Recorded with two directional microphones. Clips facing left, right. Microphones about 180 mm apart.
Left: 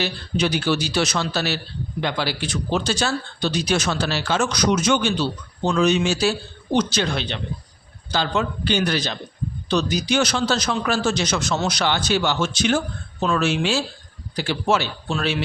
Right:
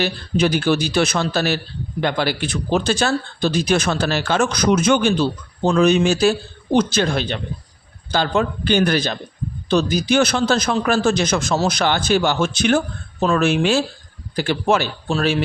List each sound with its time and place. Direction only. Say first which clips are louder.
0.0 s a man's voice: right 4 dB; 50° right (ahead or behind)